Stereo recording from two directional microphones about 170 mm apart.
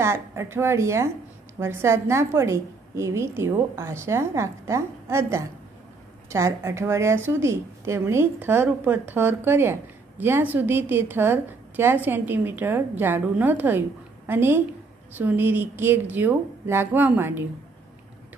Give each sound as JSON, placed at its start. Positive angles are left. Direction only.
{"t": 0.0, "sound": "a woman's voice", "side_deg": -15}